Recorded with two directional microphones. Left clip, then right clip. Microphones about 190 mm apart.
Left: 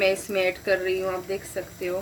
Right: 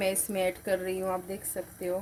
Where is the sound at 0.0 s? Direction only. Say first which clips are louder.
Left 6 dB; 50° right (ahead or behind).